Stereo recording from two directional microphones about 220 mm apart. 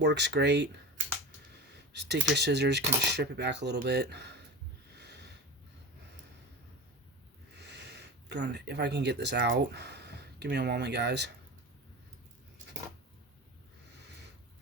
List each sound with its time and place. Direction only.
0.0 s speech: 50° right (ahead or behind)
4.9 s a sound: 50° right (ahead or behind)
7.6 s speech: 50° right (ahead or behind)